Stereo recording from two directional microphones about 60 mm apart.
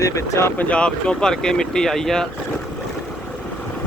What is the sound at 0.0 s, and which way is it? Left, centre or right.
Speech, left.